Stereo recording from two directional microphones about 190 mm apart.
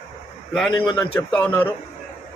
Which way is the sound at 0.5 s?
5° left (ahead or behind).